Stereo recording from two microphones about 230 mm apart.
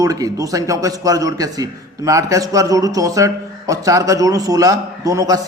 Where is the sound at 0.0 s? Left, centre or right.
Centre.